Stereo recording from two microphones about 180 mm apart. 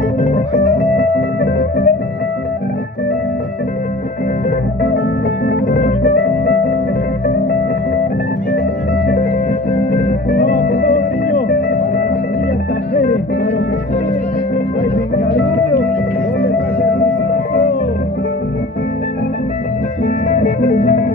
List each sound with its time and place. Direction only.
0.2 s music: 45° left (ahead or behind)
0.9 s music: 60° left (ahead or behind)
5.5 s music: 50° left (ahead or behind)
10.3 s music: 75° left (ahead or behind)
16.3 s music: 60° left (ahead or behind)
20.3 s music: 45° left (ahead or behind)